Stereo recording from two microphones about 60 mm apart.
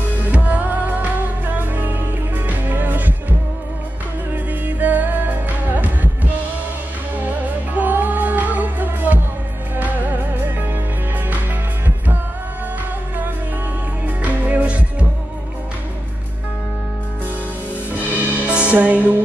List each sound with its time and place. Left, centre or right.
0.2 s music: right
4.6 s music: right
7.2 s music: right
14.0 s music: right
17.9 s music: right